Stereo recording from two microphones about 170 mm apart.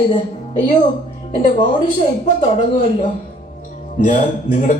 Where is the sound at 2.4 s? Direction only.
45° left (ahead or behind).